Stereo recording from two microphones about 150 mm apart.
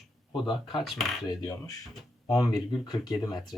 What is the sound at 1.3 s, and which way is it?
Speech, 25° left (ahead or behind).